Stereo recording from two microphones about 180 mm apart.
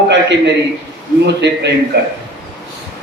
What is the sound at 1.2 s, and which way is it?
Speech, 75° right (ahead or behind).